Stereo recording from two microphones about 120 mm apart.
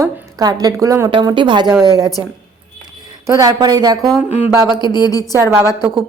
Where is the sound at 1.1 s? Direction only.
40° right (ahead or behind).